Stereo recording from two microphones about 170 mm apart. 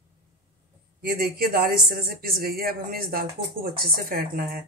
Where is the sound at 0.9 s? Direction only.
60° right (ahead or behind).